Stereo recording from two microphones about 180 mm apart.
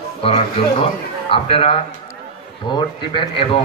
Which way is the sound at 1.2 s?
30° left (ahead or behind).